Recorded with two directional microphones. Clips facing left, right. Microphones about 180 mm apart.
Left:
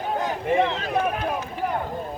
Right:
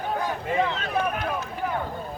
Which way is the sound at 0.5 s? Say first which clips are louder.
Left 4 dB; 20° left (ahead or behind).